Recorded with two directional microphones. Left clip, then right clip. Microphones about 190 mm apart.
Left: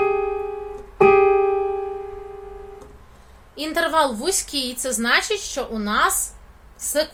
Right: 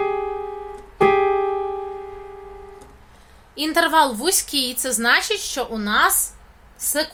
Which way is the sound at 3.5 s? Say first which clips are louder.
Right 3 dB; 30° right (ahead or behind).